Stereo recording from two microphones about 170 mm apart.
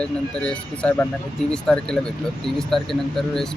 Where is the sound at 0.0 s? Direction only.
5° left (ahead or behind).